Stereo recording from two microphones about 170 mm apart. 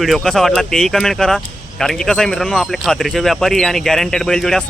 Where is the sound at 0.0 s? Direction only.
Centre (ahead or behind).